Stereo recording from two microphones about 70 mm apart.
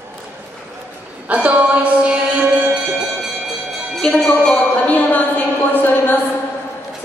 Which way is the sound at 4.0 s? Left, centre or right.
Centre.